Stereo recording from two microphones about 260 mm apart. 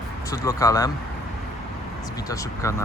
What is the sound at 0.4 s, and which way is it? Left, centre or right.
Speech, centre.